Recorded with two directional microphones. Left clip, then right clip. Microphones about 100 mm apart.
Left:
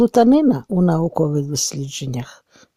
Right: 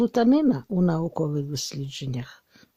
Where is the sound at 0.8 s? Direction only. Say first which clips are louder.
Left 8 dB; 65° left (ahead or behind).